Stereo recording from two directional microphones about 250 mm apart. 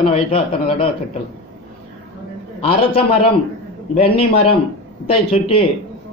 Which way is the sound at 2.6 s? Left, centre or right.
Left.